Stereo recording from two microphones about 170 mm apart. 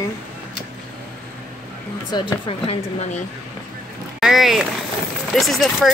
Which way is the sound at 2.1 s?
30° left (ahead or behind).